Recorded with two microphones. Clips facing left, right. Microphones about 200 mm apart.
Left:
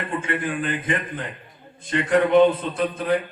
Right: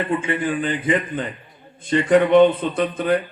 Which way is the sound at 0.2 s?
Centre (ahead or behind).